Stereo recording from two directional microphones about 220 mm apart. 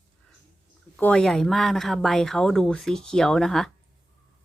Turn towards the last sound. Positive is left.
turn(degrees=0)  # may be behind; listen again after turning